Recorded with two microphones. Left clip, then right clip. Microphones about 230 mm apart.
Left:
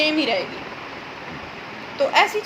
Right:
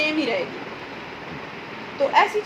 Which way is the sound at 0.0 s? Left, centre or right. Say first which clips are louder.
Left 3 dB; left.